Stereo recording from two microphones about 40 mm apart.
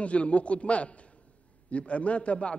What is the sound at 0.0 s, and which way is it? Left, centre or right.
A man's voice, left.